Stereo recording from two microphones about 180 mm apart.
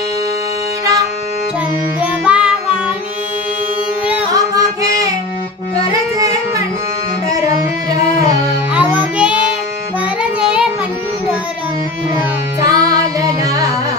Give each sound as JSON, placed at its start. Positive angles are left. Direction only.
{"t": 2.0, "sound": "music", "side_deg": -5}
{"t": 4.3, "sound": "music", "side_deg": -20}
{"t": 8.7, "sound": "music", "side_deg": -5}
{"t": 12.5, "sound": "music", "side_deg": -20}